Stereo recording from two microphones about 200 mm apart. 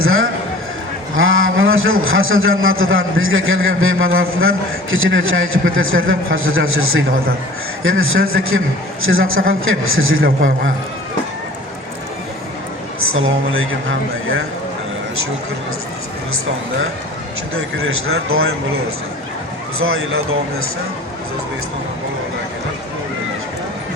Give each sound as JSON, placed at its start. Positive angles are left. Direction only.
{"t": 0.0, "sound": "a man's voice", "side_deg": -90}
{"t": 13.0, "sound": "a man's voice", "side_deg": -85}
{"t": 17.5, "sound": "a man's voice", "side_deg": -90}
{"t": 19.8, "sound": "a man's voice", "side_deg": -90}